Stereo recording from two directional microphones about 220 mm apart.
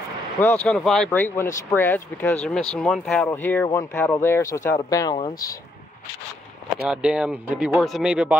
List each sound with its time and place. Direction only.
0.4 s speech: 5° left (ahead or behind)
6.9 s speech: 5° right (ahead or behind)